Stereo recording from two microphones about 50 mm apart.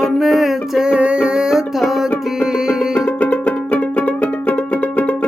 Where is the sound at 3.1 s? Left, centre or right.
Left.